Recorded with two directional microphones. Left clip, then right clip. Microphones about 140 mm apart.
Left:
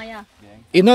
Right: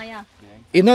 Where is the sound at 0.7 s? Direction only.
10° left (ahead or behind).